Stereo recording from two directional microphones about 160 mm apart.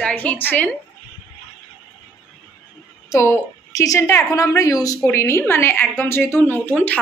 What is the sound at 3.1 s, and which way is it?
A woman's voice, 20° left (ahead or behind).